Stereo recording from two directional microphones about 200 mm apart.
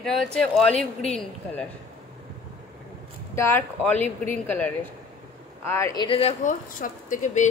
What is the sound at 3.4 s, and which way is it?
Speech, 10° left (ahead or behind).